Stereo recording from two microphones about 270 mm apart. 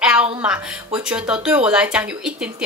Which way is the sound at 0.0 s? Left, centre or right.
Centre.